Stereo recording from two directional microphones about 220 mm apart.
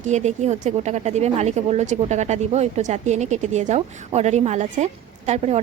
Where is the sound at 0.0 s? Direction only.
30° right (ahead or behind).